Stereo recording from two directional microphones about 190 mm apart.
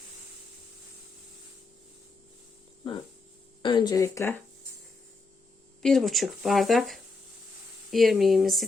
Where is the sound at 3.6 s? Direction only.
25° left (ahead or behind).